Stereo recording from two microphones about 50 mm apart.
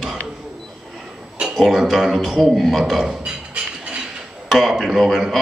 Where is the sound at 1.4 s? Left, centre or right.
Centre.